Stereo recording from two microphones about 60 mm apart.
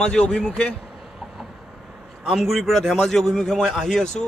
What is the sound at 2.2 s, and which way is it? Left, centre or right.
A man's voice, centre.